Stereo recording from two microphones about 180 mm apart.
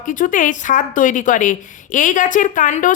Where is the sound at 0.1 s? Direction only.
45° left (ahead or behind).